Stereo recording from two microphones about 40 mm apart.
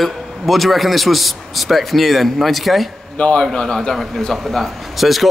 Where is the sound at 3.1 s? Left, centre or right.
Left.